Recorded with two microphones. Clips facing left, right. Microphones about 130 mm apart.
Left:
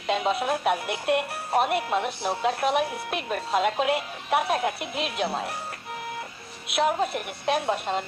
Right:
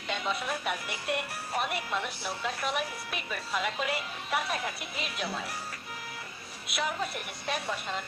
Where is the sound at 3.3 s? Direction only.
50° left (ahead or behind).